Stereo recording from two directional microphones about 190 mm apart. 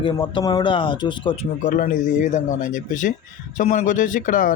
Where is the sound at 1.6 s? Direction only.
45° left (ahead or behind).